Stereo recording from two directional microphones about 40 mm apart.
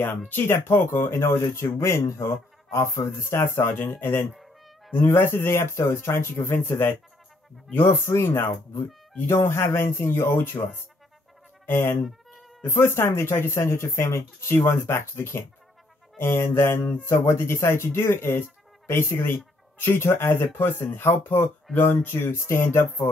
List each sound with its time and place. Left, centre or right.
0.5 s speech: left
4.3 s meow: centre
4.9 s speech: left
7.7 s speech: left
11.7 s speech: left